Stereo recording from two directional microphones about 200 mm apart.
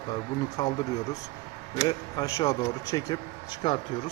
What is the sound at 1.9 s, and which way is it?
Speech, 20° left (ahead or behind).